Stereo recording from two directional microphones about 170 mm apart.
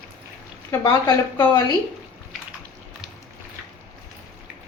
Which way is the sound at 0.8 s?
20° left (ahead or behind).